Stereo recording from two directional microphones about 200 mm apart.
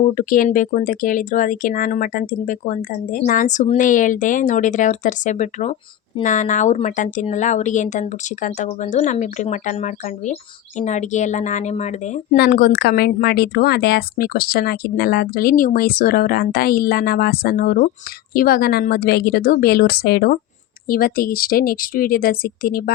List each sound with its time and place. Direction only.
0.0 s speech: 40° left (ahead or behind)
12.4 s speech: 50° left (ahead or behind)